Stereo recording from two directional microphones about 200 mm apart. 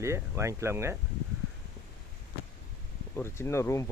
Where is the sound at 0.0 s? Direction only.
15° right (ahead or behind).